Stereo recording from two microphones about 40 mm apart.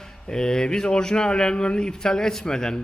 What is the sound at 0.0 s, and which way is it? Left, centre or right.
Speech, centre.